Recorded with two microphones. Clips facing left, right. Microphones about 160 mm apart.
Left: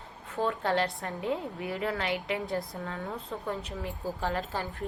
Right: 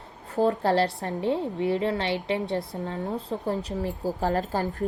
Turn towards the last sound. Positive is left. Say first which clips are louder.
# right 7 dB
turn(degrees=-40)  # may be behind; listen again after turning